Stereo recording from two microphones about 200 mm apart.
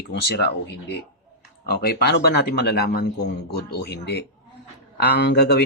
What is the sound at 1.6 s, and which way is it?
A man's voice, 50° left (ahead or behind).